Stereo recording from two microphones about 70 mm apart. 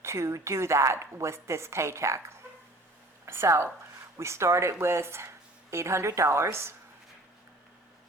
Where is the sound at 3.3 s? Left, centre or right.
Right.